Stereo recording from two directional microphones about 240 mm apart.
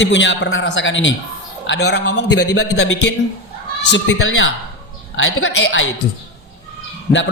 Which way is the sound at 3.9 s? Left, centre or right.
Left.